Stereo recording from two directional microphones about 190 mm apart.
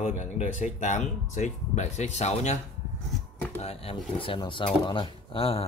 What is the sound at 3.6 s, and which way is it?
Speech, 30° left (ahead or behind).